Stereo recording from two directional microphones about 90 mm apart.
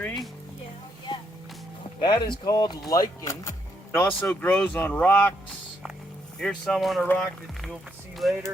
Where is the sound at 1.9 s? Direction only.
60° left (ahead or behind).